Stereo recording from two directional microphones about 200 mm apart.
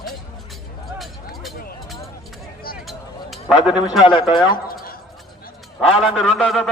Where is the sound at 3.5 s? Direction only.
25° left (ahead or behind).